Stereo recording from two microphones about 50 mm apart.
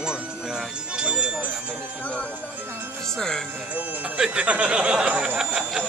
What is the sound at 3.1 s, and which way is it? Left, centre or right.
Speech, centre.